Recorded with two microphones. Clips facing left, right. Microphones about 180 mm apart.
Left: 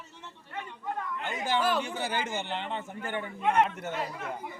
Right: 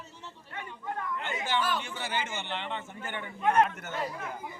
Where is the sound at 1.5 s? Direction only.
35° left (ahead or behind).